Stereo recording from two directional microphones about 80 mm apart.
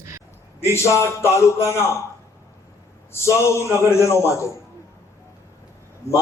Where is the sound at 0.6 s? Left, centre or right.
Left.